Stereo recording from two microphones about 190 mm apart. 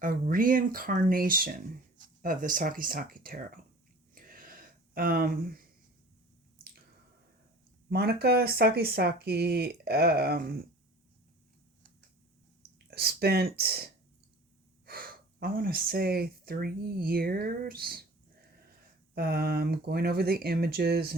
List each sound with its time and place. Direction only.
0.0 s speech: 45° right (ahead or behind)
4.1 s a sound: 50° right (ahead or behind)
7.9 s speech: 55° right (ahead or behind)
12.9 s speech: 55° right (ahead or behind)
19.1 s speech: 55° right (ahead or behind)